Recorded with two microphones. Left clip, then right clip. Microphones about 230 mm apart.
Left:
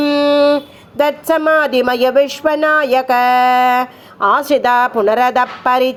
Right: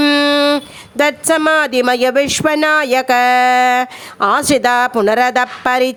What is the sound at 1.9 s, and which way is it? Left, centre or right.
Speech, right.